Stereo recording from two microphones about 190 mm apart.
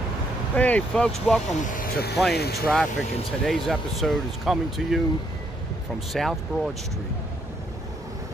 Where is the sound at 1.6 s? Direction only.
45° left (ahead or behind).